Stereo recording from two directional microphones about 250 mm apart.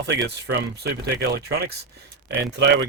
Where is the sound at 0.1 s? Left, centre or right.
Right.